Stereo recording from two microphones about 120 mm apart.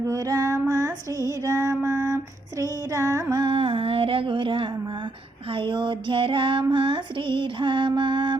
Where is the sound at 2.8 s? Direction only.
25° right (ahead or behind).